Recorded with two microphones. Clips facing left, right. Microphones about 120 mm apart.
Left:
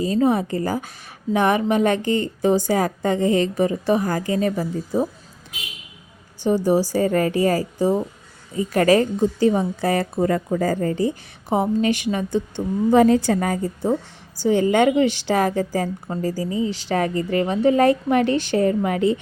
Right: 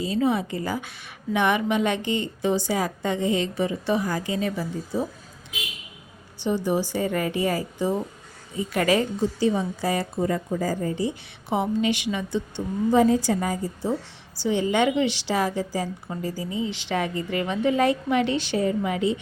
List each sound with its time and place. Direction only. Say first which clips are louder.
0.0 s a woman's voice: left 4 dB; 45° left (ahead or behind)
6.4 s a woman's voice: left 6 dB; 40° left (ahead or behind)
12.9 s a woman's voice: left 4 dB; 65° left (ahead or behind)
14.3 s a woman's voice: left 5 dB; 45° left (ahead or behind)